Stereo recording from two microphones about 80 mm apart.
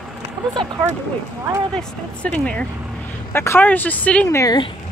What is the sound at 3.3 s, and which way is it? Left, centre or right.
Speech, left.